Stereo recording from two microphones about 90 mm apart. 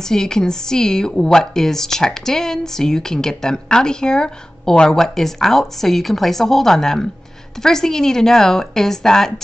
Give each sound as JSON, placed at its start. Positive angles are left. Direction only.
{"t": 0.0, "sound": "a woman's voice", "side_deg": 5}